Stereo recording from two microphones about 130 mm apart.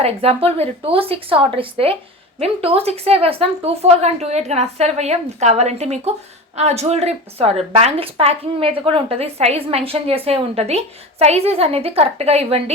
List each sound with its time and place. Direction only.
0.0 s a woman's voice: 50° right (ahead or behind)